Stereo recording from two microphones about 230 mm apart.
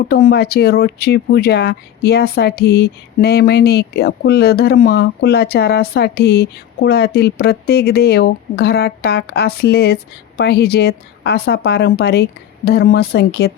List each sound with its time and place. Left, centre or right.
0.0 s speech: left